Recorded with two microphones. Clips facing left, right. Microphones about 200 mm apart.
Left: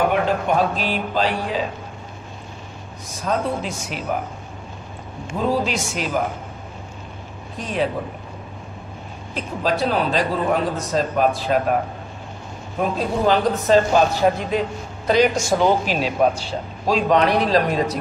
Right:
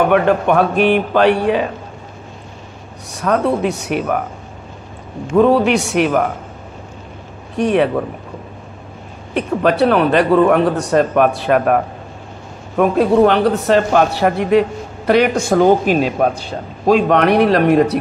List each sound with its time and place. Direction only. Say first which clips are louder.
0.1 s a man's voice: right 7 dB; 60° right (ahead or behind)
3.2 s a man's voice: right 7 dB; 65° right (ahead or behind)
5.3 s a man's voice: right 10 dB; 60° right (ahead or behind)
7.5 s a man's voice: right 9 dB; 65° right (ahead or behind)
9.3 s a man's voice: right 7 dB; 65° right (ahead or behind)